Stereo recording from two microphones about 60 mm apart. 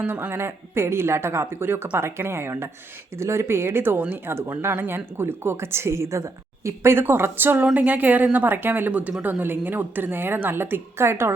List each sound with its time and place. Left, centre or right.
0.0 s speech: right
6.7 s speech: right
8.9 s speech: right